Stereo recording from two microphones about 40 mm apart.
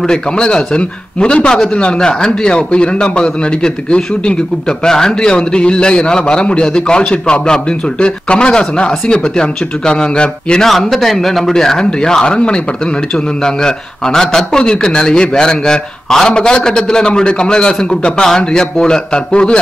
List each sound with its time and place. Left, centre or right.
0.0 s a man's voice: centre
10.6 s a man's voice: centre; by 19.6 s left